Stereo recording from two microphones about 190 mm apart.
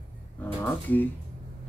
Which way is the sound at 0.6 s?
10° left (ahead or behind).